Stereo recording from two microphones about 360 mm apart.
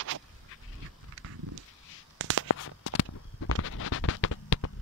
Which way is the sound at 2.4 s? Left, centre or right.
Left.